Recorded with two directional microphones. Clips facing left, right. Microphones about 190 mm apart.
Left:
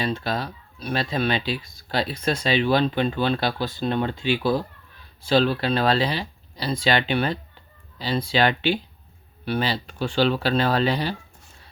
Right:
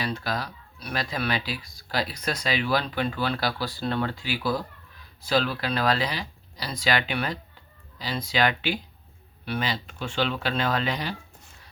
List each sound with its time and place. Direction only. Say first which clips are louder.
0.0 s speech: left 4 dB; 25° left (ahead or behind)